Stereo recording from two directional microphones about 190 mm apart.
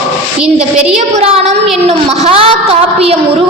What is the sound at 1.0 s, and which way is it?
A woman's voice, 35° right (ahead or behind).